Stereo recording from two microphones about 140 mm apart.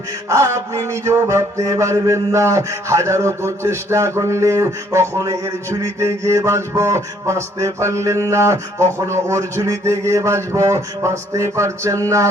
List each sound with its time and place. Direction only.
0.3 s mantra: 20° right (ahead or behind)